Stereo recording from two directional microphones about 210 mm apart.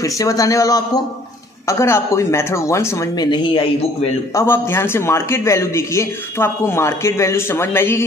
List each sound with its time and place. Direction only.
0.0 s a man's voice: 15° left (ahead or behind)
4.4 s a man's voice: 10° left (ahead or behind)